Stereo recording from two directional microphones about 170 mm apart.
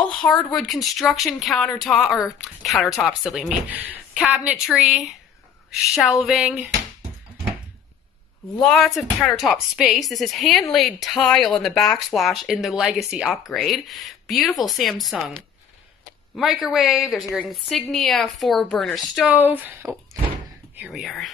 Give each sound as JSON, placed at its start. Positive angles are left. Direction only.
{"t": 0.0, "sound": "a woman's voice", "side_deg": 0}
{"t": 8.5, "sound": "a woman's voice", "side_deg": 0}